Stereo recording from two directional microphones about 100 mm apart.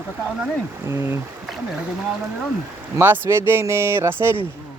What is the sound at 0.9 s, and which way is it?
Speech, 25° right (ahead or behind).